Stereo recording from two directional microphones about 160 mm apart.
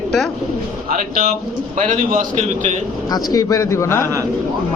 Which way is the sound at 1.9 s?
55° right (ahead or behind).